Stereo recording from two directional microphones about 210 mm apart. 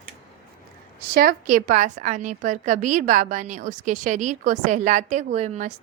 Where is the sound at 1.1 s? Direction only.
45° right (ahead or behind).